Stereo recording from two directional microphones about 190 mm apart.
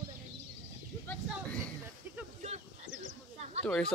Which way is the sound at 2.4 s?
40° right (ahead or behind).